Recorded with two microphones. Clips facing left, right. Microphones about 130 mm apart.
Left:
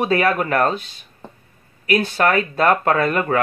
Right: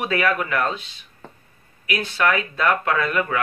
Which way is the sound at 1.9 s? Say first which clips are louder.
Left 4 dB; 45° left (ahead or behind).